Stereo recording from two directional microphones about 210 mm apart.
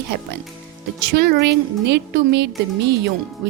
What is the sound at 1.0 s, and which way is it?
A woman's voice, 50° right (ahead or behind).